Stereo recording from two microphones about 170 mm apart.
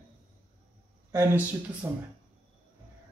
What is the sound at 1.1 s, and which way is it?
Speech, 15° right (ahead or behind).